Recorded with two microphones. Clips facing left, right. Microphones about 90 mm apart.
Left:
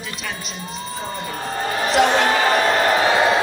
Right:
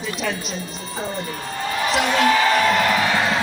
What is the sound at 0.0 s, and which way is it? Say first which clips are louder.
Speech: right 5 dB; centre (ahead or behind).